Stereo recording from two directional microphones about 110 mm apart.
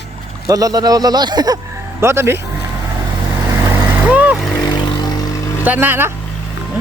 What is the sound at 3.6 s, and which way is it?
Vehicle, 15° right (ahead or behind).